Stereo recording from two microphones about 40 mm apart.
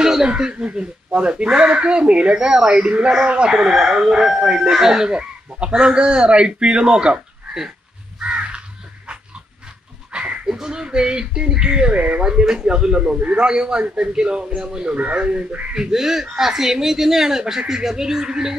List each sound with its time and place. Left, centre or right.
0.0 s chuckle: centre
0.4 s speech: centre
5.1 s speech: right
8.2 s crow: right
10.1 s goat: right
10.4 s speech: centre; by 12.2 s right
12.2 s speech: right